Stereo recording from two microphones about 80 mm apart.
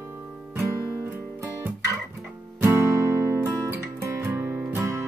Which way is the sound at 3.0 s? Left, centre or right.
Right.